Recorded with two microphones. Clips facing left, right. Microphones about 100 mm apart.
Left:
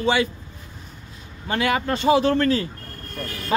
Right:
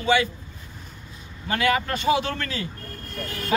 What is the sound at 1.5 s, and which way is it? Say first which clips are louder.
Speech: left 1 dB; 25° left (ahead or behind).